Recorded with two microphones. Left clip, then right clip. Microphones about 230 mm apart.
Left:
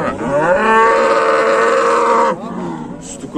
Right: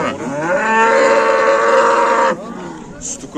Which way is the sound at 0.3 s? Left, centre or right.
Left.